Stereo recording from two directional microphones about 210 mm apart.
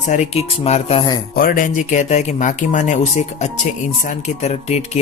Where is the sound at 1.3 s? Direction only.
40° left (ahead or behind).